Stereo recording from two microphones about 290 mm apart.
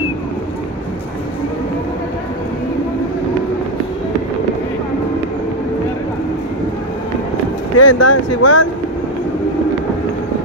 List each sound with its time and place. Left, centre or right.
7.7 s speech: left
8.4 s speech: left